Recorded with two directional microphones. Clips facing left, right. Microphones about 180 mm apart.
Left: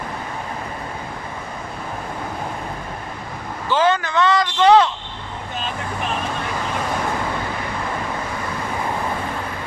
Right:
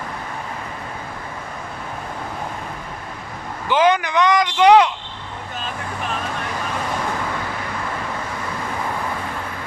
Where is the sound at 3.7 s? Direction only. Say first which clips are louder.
Right 2 dB; 15° right (ahead or behind).